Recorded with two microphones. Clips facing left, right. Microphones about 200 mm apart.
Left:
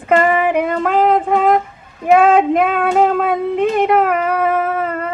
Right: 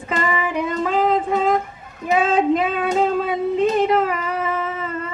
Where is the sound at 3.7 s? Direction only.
55° left (ahead or behind).